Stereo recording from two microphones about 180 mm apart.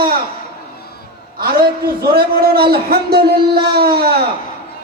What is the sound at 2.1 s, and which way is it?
A man's voice, 60° right (ahead or behind).